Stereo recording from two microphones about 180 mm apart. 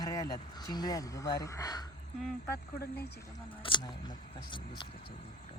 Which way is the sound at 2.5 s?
60° left (ahead or behind).